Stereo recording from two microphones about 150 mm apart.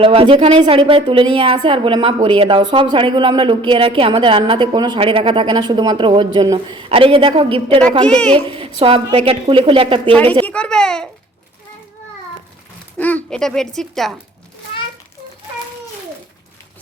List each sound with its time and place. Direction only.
0.0 s speech: 40° right (ahead or behind)
8.0 s a child's voice: 5° left (ahead or behind)
8.4 s speech: 35° right (ahead or behind)
10.4 s speech: 5° left (ahead or behind)
13.0 s speech: 10° left (ahead or behind)